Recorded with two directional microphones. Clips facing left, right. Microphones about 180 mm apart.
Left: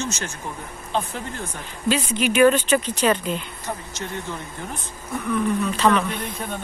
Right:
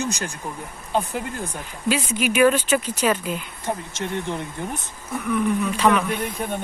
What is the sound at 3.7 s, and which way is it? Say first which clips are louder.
Speech: right 4 dB; 20° right (ahead or behind).